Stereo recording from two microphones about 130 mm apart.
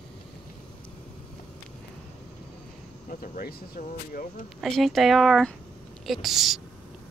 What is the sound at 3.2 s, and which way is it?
Speech, 90° left.